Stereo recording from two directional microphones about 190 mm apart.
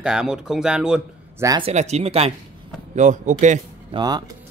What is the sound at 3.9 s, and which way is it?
Speech, 20° right (ahead or behind).